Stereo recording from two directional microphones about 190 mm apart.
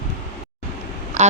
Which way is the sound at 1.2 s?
40° right (ahead or behind).